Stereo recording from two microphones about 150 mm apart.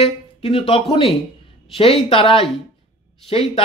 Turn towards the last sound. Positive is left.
turn(degrees=40)  # may be behind; listen again after turning